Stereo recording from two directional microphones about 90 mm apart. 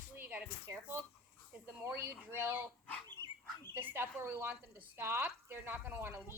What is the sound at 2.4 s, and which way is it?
Speech, 20° right (ahead or behind).